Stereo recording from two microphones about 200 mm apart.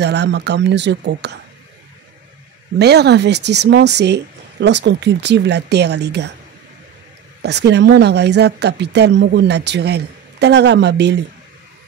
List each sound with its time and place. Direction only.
0.0 s speech: 60° right (ahead or behind)
2.8 s speech: 55° right (ahead or behind)
7.4 s speech: 60° right (ahead or behind)